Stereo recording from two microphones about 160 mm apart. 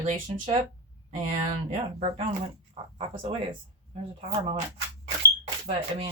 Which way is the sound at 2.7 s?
30° right (ahead or behind).